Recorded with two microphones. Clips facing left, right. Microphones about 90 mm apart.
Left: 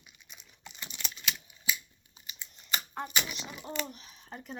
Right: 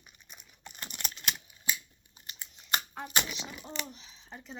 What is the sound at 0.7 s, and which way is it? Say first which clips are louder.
Typing: right 2 dB; 45° right (ahead or behind).